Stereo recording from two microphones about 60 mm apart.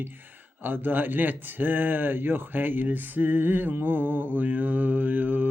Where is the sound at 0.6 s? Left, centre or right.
Right.